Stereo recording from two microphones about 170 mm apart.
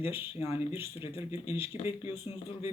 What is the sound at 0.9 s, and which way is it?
Speech, 30° left (ahead or behind).